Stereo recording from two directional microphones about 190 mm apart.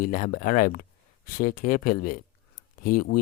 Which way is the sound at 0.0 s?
45° left (ahead or behind).